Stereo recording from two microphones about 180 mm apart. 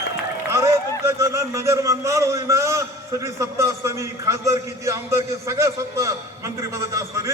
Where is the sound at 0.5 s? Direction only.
15° right (ahead or behind).